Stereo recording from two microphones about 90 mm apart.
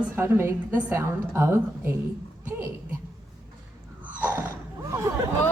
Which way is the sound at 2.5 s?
15° right (ahead or behind).